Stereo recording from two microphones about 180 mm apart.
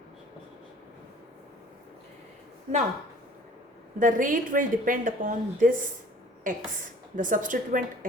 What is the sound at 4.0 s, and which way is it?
A woman's voice, 50° right (ahead or behind).